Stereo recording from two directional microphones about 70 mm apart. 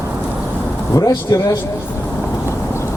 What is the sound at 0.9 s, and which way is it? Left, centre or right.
Speech, left.